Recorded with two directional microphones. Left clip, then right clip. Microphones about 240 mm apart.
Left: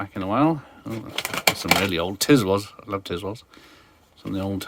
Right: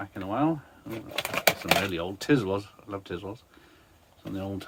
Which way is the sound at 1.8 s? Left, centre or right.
Left.